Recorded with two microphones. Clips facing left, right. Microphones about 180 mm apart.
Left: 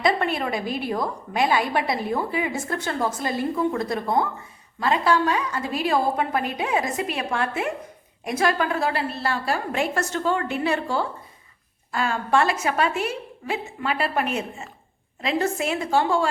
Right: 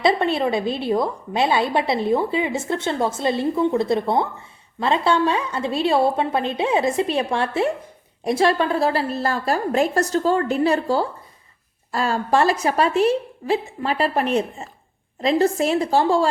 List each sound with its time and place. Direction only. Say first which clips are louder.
0.0 s a woman's voice: right 4 dB; 25° right (ahead or behind)